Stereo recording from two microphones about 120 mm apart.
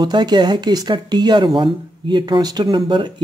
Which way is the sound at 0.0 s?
40° right (ahead or behind).